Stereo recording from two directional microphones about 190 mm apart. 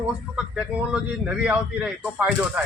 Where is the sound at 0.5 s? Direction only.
5° right (ahead or behind).